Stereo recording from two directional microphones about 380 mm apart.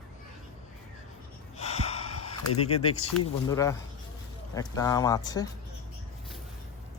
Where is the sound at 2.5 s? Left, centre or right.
Left.